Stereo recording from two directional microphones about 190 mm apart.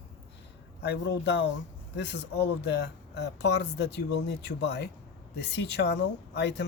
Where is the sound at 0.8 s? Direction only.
65° left (ahead or behind).